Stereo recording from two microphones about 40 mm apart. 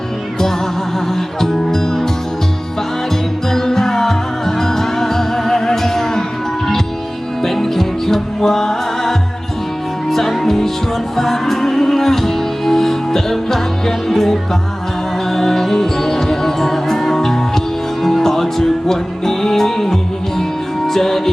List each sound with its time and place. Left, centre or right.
1.4 s music: centre
3.5 s music: centre
7.4 s music: centre